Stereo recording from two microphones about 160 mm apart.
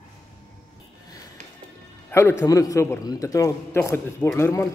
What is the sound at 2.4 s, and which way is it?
A man's voice, 20° left (ahead or behind).